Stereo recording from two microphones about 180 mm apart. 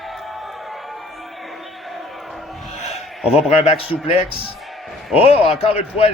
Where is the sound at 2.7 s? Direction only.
35° left (ahead or behind).